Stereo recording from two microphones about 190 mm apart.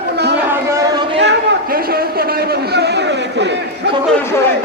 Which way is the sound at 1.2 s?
55° right (ahead or behind).